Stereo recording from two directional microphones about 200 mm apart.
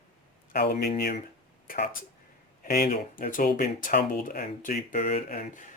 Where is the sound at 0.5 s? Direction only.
50° left (ahead or behind).